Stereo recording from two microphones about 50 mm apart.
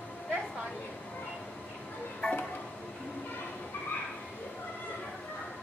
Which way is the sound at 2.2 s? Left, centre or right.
Centre.